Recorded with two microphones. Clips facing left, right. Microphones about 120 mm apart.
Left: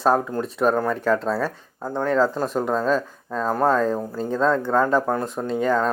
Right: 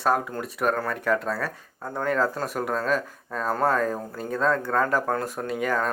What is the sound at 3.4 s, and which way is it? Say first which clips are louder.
Speech: left 3 dB; 15° left (ahead or behind).